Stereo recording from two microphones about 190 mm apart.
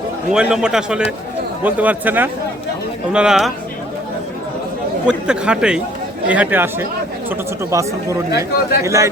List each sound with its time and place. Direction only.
0.3 s a man's voice: 5° right (ahead or behind)
5.0 s a man's voice: 5° right (ahead or behind)